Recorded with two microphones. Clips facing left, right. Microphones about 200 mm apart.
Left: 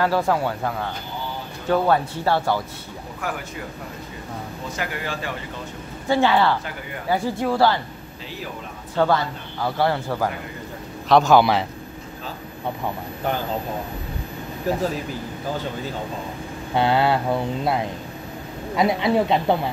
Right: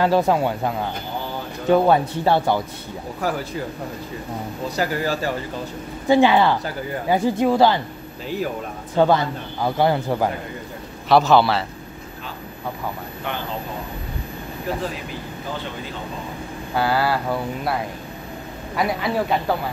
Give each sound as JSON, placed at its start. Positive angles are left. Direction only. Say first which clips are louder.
{"t": 0.0, "sound": "a man's voice", "louder": "right 3 dB", "side_deg": -20}
{"t": 3.2, "sound": "speech", "louder": "right 5 dB", "side_deg": -35}
{"t": 4.6, "sound": "speech", "louder": "right 7 dB", "side_deg": -35}
{"t": 6.0, "sound": "speech", "louder": "right 3 dB", "side_deg": -15}
{"t": 8.9, "sound": "a man's voice", "louder": "right 3 dB", "side_deg": -20}
{"t": 11.1, "sound": "a man's voice", "louder": "even", "side_deg": -5}
{"t": 11.3, "sound": "a man's voice", "louder": "left 1 dB", "side_deg": 15}
{"t": 16.7, "sound": "a sound", "louder": "left 2 dB", "side_deg": 25}
{"t": 18.8, "sound": "a sound", "louder": "left 3 dB", "side_deg": 25}